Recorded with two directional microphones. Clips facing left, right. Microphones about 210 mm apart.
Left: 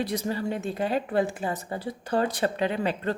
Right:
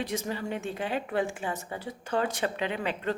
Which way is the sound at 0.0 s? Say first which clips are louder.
Left 4 dB; 35° left (ahead or behind).